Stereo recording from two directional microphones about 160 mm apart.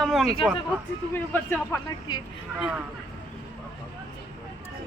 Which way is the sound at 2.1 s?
25° left (ahead or behind).